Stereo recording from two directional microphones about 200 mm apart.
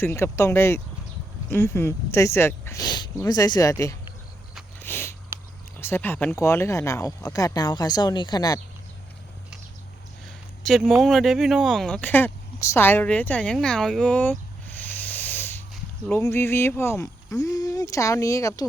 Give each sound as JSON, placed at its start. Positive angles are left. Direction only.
{"t": 0.0, "sound": "speech", "side_deg": 10}
{"t": 4.8, "sound": "sniff", "side_deg": 10}
{"t": 5.8, "sound": "speech", "side_deg": 10}
{"t": 10.2, "sound": "speech", "side_deg": 0}